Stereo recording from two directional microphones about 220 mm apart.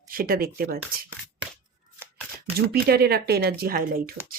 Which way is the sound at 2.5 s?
45° right (ahead or behind).